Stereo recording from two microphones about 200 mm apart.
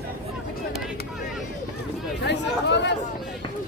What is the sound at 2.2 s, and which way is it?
Chatter, 60° left (ahead or behind).